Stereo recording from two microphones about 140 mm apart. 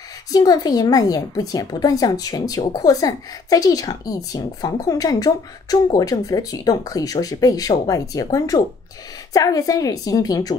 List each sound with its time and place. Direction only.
0.3 s a woman's voice: 30° left (ahead or behind)